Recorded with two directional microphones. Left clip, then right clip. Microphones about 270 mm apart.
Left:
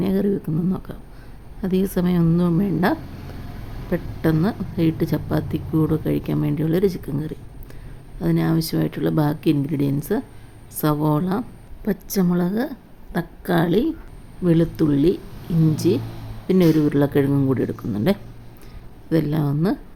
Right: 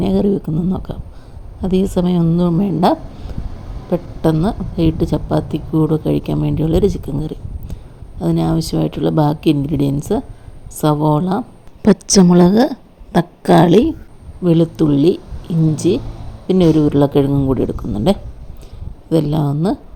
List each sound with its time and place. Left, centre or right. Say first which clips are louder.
0.0 s a woman's voice: right 6 dB; centre
11.8 s a woman's voice: right 12 dB; right
14.4 s a woman's voice: right 5 dB; centre